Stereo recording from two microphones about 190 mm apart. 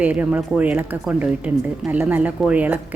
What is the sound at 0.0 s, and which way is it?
Speech, 10° right (ahead or behind).